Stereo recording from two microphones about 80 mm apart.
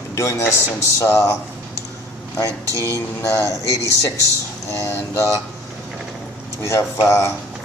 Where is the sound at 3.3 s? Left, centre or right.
Left.